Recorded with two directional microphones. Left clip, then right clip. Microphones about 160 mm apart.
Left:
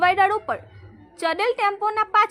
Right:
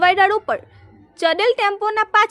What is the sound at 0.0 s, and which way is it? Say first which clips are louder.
A woman's voice: right 4 dB; 30° right (ahead or behind).